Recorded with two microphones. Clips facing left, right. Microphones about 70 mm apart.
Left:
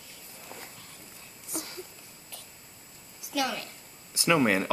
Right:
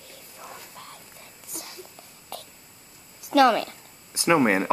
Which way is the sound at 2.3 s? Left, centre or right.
Right.